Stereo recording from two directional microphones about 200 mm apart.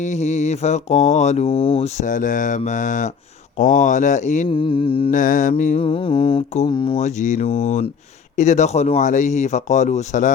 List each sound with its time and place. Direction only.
0.0 s speech: 35° left (ahead or behind)
4.4 s mantra: 25° left (ahead or behind)
5.1 s speech: 40° left (ahead or behind)